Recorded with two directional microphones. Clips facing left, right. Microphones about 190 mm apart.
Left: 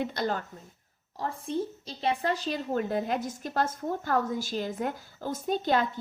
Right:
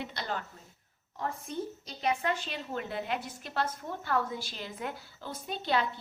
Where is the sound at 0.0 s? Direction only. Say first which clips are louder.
Left 7 dB; 45° left (ahead or behind).